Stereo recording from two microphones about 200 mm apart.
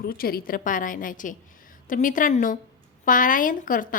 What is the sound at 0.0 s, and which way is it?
A woman's voice, 50° left (ahead or behind).